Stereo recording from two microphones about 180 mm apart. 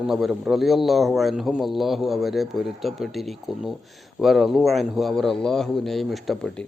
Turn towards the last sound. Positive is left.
turn(degrees=0)  # may be behind; listen again after turning